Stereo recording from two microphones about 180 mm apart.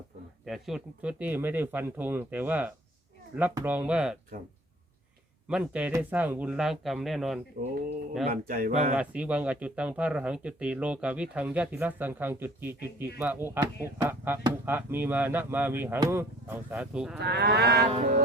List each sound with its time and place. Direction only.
0.4 s speech: centre (ahead or behind)
5.5 s speech: 5° right (ahead or behind)
7.6 s speech: 45° right (ahead or behind)
9.0 s speech: 5° right (ahead or behind)
17.2 s livestock: 65° right (ahead or behind)